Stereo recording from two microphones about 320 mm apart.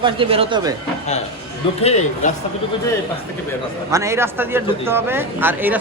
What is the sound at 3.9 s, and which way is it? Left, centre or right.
A man's voice, centre.